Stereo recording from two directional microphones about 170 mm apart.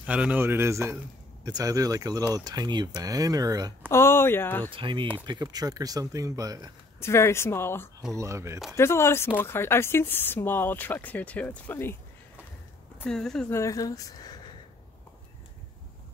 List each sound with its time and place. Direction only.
0.0 s a man's voice: 10° right (ahead or behind)
3.9 s speech: 15° left (ahead or behind)
4.6 s speech: 30° right (ahead or behind)
7.0 s speech: 15° left (ahead or behind)
8.1 s a man's voice: 15° right (ahead or behind)
8.7 s speech: 15° left (ahead or behind)
13.0 s speech: 5° left (ahead or behind)
13.5 s speech: 15° left (ahead or behind)